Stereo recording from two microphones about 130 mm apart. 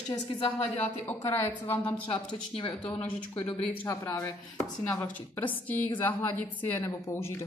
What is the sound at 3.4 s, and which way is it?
A woman's voice, 10° left (ahead or behind).